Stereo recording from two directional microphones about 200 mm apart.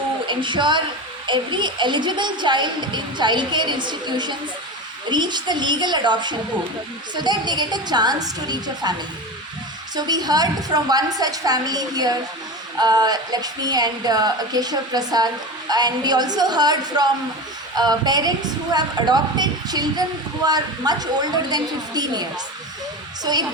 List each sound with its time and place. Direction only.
0.3 s a woman's voice: 25° right (ahead or behind)